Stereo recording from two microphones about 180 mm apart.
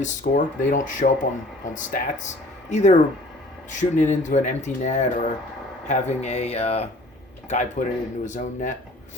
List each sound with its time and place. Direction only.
0.0 s speech: 45° left (ahead or behind)